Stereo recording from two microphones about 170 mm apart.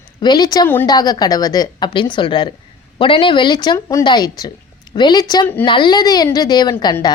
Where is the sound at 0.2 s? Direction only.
25° left (ahead or behind).